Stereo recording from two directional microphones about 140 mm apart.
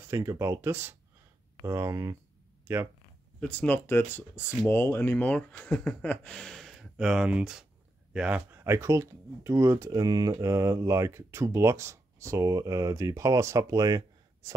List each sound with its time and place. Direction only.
0.1 s speech: 20° right (ahead or behind)
3.3 s speech: 10° left (ahead or behind); by 14.5 s 25° right (ahead or behind)